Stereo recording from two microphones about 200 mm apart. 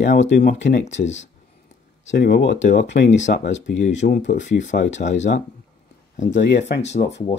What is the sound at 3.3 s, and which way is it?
Speech, 40° left (ahead or behind).